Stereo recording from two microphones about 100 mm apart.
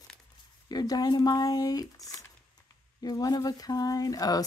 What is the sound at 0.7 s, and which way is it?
Speech, 40° left (ahead or behind).